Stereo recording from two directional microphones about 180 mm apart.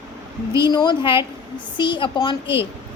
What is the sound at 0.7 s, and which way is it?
Speech, 25° left (ahead or behind).